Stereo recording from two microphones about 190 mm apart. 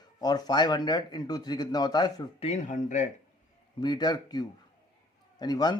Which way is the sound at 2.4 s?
40° left (ahead or behind).